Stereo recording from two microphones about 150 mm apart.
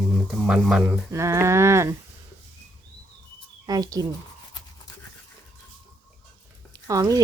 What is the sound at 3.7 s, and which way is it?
Speech, 25° right (ahead or behind).